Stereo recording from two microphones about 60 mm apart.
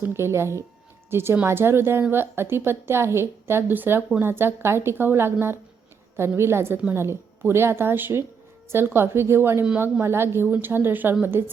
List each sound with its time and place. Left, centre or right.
0.0 s a woman's voice: right
11.3 s a woman's voice: right